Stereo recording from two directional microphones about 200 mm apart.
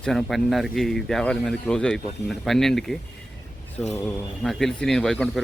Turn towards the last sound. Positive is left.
turn(degrees=0)  # may be behind; listen again after turning